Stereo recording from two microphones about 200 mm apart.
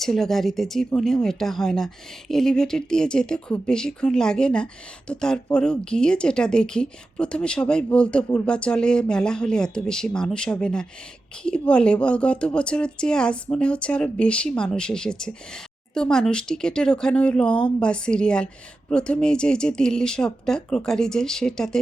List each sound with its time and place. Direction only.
0.0 s speech: centre (ahead or behind)